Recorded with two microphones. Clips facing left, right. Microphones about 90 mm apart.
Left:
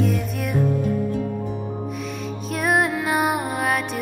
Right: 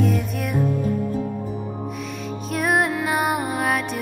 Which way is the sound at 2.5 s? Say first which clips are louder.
Even; centre (ahead or behind).